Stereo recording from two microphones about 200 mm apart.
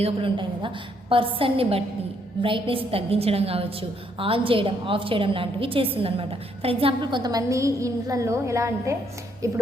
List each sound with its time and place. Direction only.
0.0 s a woman's voice: 25° right (ahead or behind)